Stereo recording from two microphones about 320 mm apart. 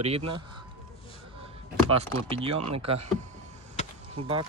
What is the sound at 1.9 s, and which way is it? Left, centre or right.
Speech, centre.